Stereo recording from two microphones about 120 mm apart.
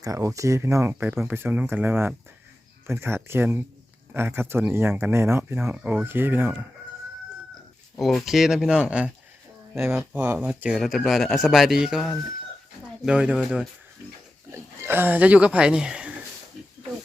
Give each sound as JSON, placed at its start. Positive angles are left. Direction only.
{"t": 0.0, "sound": "speech", "side_deg": -30}
{"t": 7.9, "sound": "speech", "side_deg": 0}
{"t": 10.2, "sound": "speech", "side_deg": -15}
{"t": 10.8, "sound": "speech", "side_deg": 0}
{"t": 14.5, "sound": "speech", "side_deg": -20}